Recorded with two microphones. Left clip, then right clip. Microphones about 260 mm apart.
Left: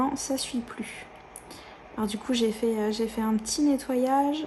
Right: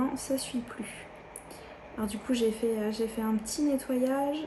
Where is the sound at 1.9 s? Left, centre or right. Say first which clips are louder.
Left 3 dB; left.